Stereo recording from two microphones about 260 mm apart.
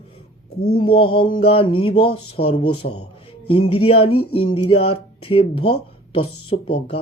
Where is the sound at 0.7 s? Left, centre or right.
Centre.